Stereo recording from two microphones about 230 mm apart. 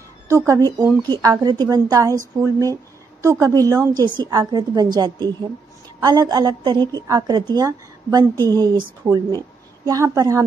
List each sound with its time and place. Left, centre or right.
0.3 s a woman's voice: centre